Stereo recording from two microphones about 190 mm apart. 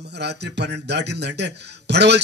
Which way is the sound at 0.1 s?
60° right (ahead or behind).